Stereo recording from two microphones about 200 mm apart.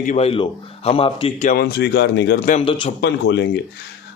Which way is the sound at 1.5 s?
50° left (ahead or behind).